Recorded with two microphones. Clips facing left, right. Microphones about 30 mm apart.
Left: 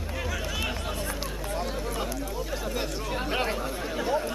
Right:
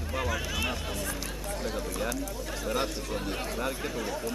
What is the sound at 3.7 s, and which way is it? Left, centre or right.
Speech, centre.